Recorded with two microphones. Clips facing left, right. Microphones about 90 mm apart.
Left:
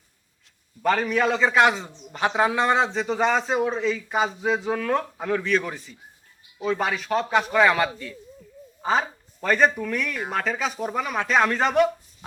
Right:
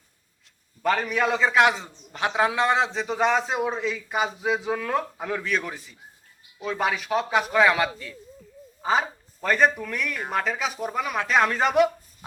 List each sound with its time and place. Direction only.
0.8 s a man's voice: centre (ahead or behind)